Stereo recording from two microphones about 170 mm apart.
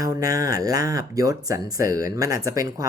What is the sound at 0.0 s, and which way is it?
Speech, 20° right (ahead or behind).